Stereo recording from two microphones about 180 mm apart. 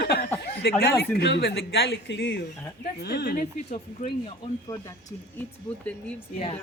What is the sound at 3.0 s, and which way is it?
Speech, 60° left (ahead or behind).